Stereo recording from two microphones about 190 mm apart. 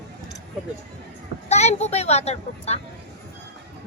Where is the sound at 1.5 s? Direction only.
35° left (ahead or behind).